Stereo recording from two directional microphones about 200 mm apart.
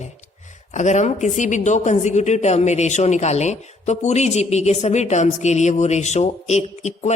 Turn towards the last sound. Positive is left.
turn(degrees=35)  # may be behind; listen again after turning